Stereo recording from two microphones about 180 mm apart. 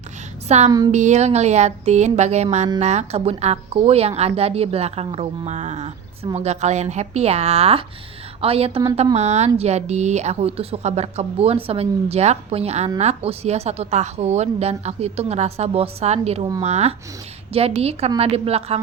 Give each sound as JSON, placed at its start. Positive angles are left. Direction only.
{"t": 0.4, "sound": "a woman's voice", "side_deg": -40}